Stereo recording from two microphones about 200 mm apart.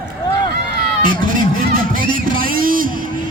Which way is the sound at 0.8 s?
45° right (ahead or behind).